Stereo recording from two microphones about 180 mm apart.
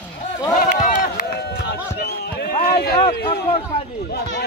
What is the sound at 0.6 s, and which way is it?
Run, 45° left (ahead or behind).